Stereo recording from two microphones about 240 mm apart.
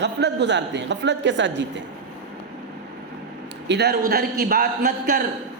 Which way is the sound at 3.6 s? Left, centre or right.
Right.